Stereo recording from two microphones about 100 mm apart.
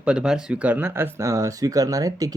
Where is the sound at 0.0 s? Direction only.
10° right (ahead or behind).